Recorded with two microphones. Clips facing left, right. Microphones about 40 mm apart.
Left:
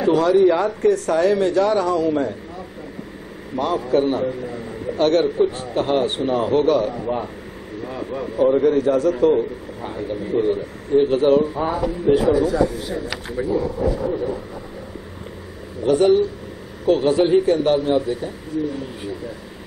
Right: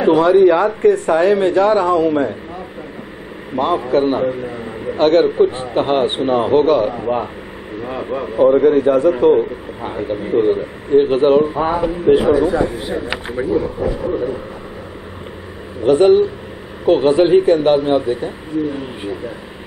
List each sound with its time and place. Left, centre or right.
0.0 s a man's voice: right
3.5 s a man's voice: right
15.8 s a man's voice: right